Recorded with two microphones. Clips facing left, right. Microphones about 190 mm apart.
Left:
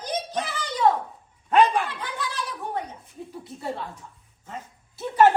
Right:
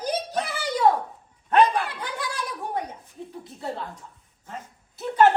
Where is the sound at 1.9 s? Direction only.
10° right (ahead or behind).